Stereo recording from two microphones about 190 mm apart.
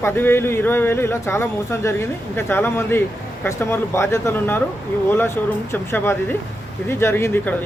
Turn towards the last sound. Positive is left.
turn(degrees=10)  # may be behind; listen again after turning